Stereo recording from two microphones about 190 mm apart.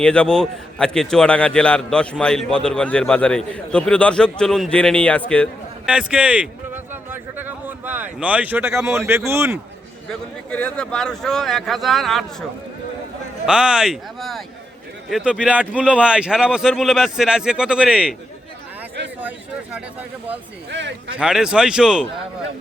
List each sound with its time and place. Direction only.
0.0 s a man's voice: 5° left (ahead or behind)
5.8 s a man's voice: 5° right (ahead or behind)
6.9 s a sound: 10° right (ahead or behind)
10.1 s a man's voice: 5° left (ahead or behind)
20.7 s a man's voice: 65° right (ahead or behind)
21.2 s a man's voice: 5° right (ahead or behind)